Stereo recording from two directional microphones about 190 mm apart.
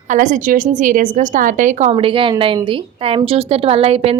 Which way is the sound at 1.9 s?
30° right (ahead or behind).